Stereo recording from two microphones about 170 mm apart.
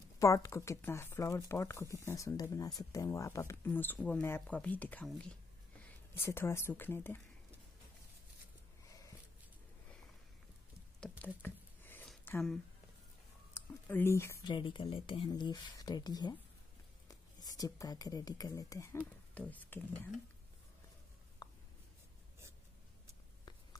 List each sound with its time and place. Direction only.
0.2 s speech: 15° left (ahead or behind)
11.0 s squish: 10° left (ahead or behind)
12.3 s speech: 5° left (ahead or behind)
14.5 s speech: 30° left (ahead or behind); by 19.8 s 10° left (ahead or behind)
21.4 s writing: 25° left (ahead or behind)